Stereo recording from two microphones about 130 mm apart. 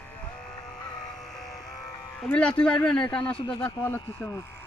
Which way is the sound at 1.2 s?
Centre (ahead or behind).